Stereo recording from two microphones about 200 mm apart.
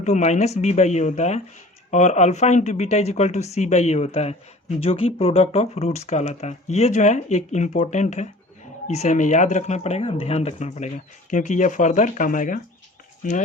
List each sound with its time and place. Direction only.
0.0 s speech: 35° left (ahead or behind)